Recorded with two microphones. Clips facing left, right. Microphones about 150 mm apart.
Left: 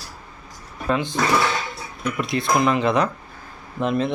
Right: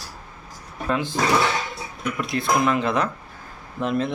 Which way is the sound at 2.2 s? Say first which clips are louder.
Left 1 dB; centre (ahead or behind).